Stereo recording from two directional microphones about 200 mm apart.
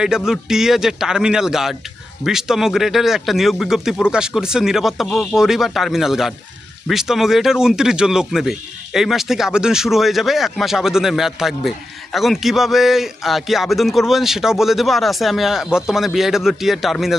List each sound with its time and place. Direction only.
0.3 s speech: centre (ahead or behind)